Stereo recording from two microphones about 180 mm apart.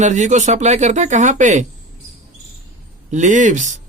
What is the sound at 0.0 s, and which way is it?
Speech, 40° right (ahead or behind).